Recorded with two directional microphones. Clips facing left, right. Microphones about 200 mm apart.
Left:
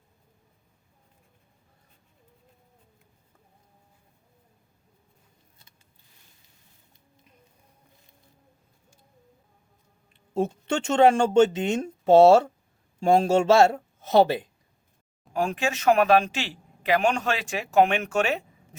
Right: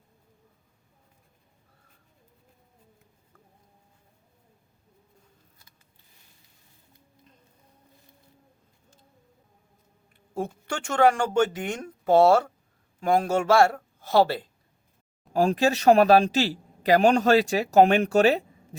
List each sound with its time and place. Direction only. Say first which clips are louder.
10.1 s speech: left 5 dB; 25° left (ahead or behind)
15.3 s speech: right 5 dB; 35° right (ahead or behind)